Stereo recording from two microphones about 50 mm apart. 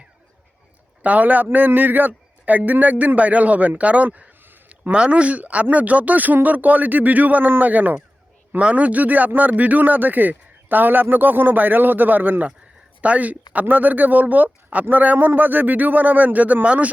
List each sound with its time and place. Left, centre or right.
1.0 s a man's voice: right